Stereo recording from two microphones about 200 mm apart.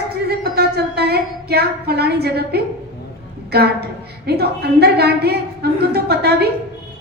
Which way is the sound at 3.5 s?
55° right (ahead or behind).